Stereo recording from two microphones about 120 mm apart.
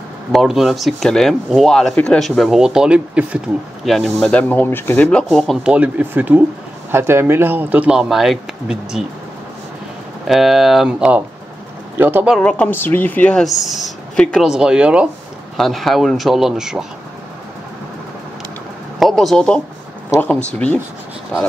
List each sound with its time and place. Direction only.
0.3 s speech: centre (ahead or behind)
3.8 s speech: centre (ahead or behind)
5.6 s speech: 10° right (ahead or behind)
10.2 s speech: centre (ahead or behind); by 12.3 s 15° right (ahead or behind)
12.3 s speech: 5° left (ahead or behind)
14.4 s speech: 5° right (ahead or behind)
18.9 s speech: centre (ahead or behind)